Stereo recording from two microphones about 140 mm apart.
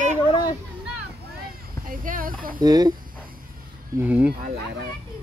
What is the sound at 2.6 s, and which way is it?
Speech, 30° right (ahead or behind).